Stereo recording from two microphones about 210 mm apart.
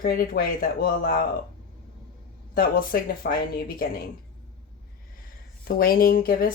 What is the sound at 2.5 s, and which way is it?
Speech, 45° left (ahead or behind).